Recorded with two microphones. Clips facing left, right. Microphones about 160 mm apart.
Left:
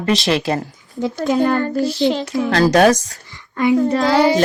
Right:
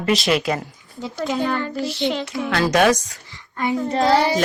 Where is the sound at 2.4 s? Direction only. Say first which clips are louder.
Left 4 dB; 35° left (ahead or behind).